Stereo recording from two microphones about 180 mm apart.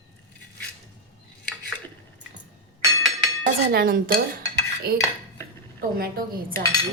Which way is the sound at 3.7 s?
55° right (ahead or behind).